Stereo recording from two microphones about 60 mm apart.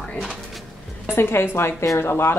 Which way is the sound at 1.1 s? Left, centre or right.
Left.